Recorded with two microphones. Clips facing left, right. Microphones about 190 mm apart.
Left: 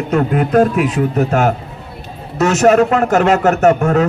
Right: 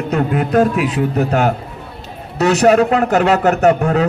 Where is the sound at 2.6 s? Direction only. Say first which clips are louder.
Left 2 dB; 40° left (ahead or behind).